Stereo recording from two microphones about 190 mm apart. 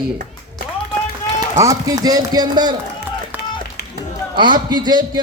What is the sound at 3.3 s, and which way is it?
Run, 10° right (ahead or behind).